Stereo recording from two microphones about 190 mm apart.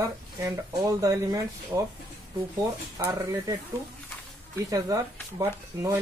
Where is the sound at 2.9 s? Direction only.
20° right (ahead or behind).